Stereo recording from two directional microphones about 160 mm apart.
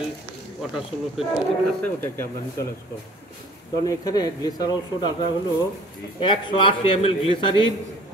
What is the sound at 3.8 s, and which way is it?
A man's voice, 25° left (ahead or behind).